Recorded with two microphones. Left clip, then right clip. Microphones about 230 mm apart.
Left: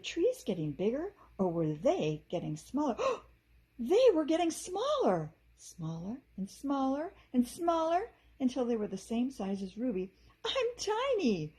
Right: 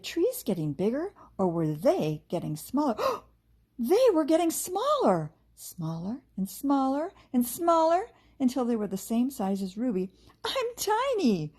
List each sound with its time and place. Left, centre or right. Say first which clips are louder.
0.0 s speech: right 3 dB; right